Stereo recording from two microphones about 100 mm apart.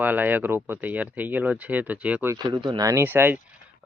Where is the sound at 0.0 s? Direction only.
20° right (ahead or behind).